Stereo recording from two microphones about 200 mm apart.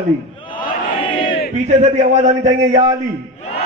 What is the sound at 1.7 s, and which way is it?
A man's voice, 35° right (ahead or behind).